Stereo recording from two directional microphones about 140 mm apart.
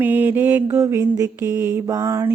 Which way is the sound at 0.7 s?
20° right (ahead or behind).